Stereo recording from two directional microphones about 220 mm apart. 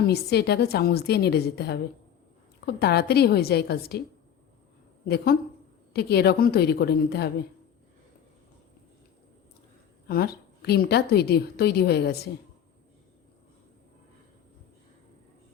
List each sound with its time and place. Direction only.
0.0 s a woman's voice: 45° left (ahead or behind)
5.0 s a woman's voice: 45° left (ahead or behind)
10.1 s a woman's voice: 45° left (ahead or behind)